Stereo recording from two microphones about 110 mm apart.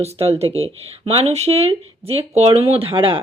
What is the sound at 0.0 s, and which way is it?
Speech, 70° right (ahead or behind).